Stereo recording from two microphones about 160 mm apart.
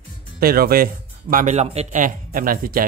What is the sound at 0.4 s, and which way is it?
Speech, 70° right (ahead or behind).